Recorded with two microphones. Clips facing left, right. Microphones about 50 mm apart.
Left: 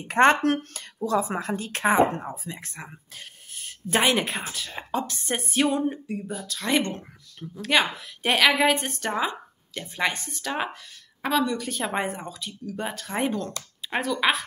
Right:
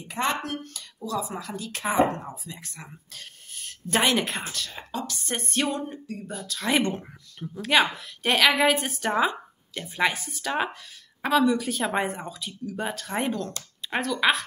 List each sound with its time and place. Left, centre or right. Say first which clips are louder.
0.0 s speech: left 9 dB; left
2.8 s speech: left 2 dB; left
3.6 s a woman's voice: left 1 dB; centre
4.7 s speech: left 4 dB; left
5.3 s a woman's voice: left 4 dB; centre
6.8 s a woman's voice: right 3 dB; centre